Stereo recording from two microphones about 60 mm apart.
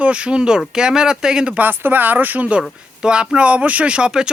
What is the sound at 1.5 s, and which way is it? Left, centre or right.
Speech, right.